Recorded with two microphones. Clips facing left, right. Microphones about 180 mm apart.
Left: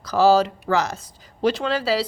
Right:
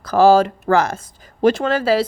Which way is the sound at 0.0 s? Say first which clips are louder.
Right 4 dB; 55° right (ahead or behind).